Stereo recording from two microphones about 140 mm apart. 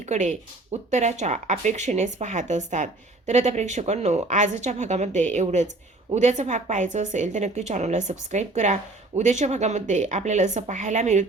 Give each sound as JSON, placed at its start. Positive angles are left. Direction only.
{"t": 0.0, "sound": "speech", "side_deg": -55}